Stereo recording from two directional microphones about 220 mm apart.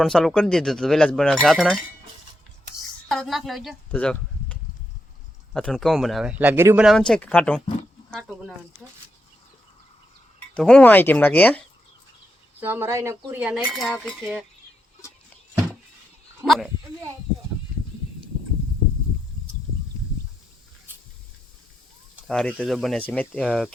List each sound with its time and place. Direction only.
0.0 s speech: centre (ahead or behind)
3.1 s speech: centre (ahead or behind)
5.5 s speech: 5° left (ahead or behind)
7.1 s speech: 5° left (ahead or behind)
10.5 s speech: 5° left (ahead or behind)
12.5 s cutlery: 10° right (ahead or behind)
16.4 s speech: centre (ahead or behind)
22.3 s speech: 5° left (ahead or behind)